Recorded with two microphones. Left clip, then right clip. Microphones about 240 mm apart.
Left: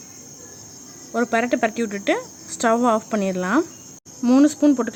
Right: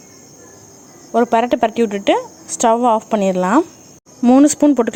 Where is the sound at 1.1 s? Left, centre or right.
Centre.